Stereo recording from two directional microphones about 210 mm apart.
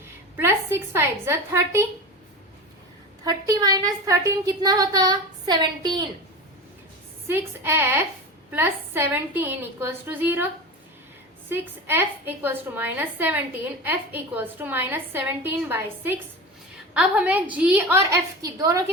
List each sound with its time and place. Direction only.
0.3 s a woman's voice: 10° right (ahead or behind)
3.2 s a woman's voice: 15° right (ahead or behind)
7.3 s a woman's voice: 10° right (ahead or behind)